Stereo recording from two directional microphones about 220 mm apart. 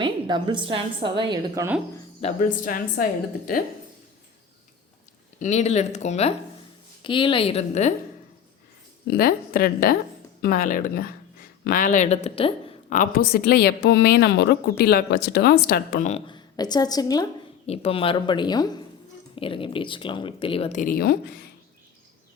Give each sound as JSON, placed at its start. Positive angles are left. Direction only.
{"t": 0.0, "sound": "a woman's voice", "side_deg": -20}
{"t": 2.2, "sound": "a woman's voice", "side_deg": 35}
{"t": 5.4, "sound": "a woman's voice", "side_deg": 30}
{"t": 9.0, "sound": "a woman's voice", "side_deg": 45}
{"t": 13.0, "sound": "a woman's voice", "side_deg": 40}
{"t": 16.0, "sound": "a woman's voice", "side_deg": 25}